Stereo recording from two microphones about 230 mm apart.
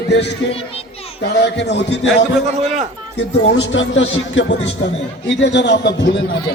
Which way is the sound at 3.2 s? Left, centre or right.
Left.